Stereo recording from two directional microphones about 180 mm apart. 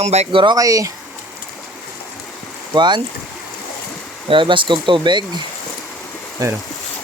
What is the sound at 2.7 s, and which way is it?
Speech, 25° right (ahead or behind).